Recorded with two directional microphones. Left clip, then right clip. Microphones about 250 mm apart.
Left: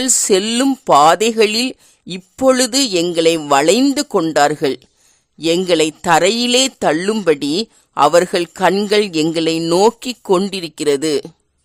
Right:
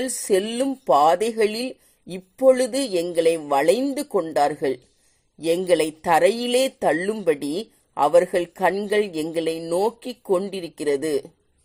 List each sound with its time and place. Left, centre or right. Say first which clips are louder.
0.0 s a man's voice: left 7 dB; left